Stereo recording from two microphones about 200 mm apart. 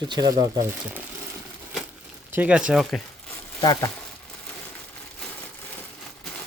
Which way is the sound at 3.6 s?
20° left (ahead or behind).